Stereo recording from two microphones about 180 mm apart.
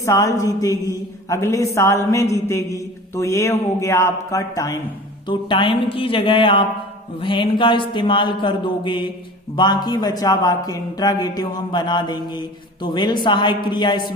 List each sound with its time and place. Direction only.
0.0 s a man's voice: 15° left (ahead or behind)